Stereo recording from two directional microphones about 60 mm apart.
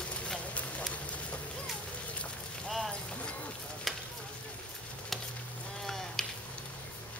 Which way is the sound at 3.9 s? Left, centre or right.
Centre.